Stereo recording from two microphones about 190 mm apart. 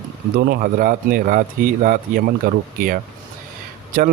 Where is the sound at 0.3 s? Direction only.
55° right (ahead or behind).